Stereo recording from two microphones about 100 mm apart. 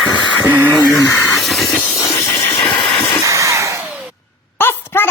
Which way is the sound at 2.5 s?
55° left (ahead or behind).